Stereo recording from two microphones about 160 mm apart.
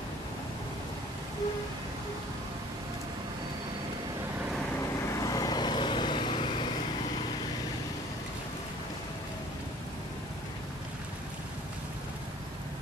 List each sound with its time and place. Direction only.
5.2 s vehicle: 25° left (ahead or behind)